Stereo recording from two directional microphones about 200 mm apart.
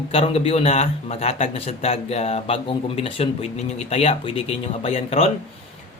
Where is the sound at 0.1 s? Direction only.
30° left (ahead or behind).